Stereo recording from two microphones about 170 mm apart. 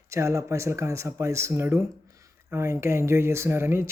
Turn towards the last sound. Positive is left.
turn(degrees=-15)  # may be behind; listen again after turning